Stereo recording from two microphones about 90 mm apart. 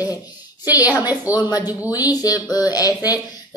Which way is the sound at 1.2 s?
20° right (ahead or behind).